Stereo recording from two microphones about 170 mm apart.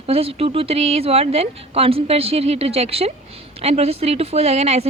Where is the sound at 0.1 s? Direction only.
35° right (ahead or behind).